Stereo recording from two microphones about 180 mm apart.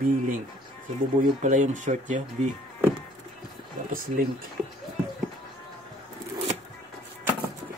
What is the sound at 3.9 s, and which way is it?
Speech, 55° right (ahead or behind).